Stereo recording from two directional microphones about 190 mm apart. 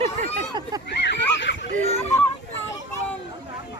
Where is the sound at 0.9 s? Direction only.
65° left (ahead or behind).